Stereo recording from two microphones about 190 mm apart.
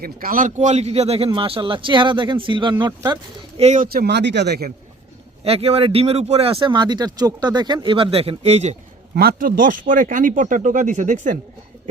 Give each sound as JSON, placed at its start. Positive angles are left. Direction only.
{"t": 0.0, "sound": "speech", "side_deg": -50}
{"t": 3.6, "sound": "speech", "side_deg": -35}
{"t": 3.9, "sound": "speech", "side_deg": -60}
{"t": 5.4, "sound": "speech", "side_deg": -30}
{"t": 9.1, "sound": "speech", "side_deg": -50}